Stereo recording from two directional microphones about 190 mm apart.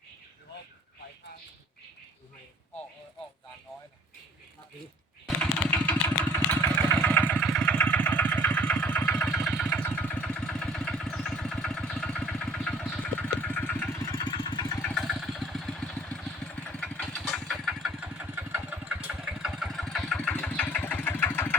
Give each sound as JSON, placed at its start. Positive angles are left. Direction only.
{"t": 5.4, "sound": "a sound", "side_deg": 10}
{"t": 6.6, "sound": "engine", "side_deg": 10}
{"t": 14.1, "sound": "vehicle", "side_deg": 25}
{"t": 14.8, "sound": "vehicle", "side_deg": 10}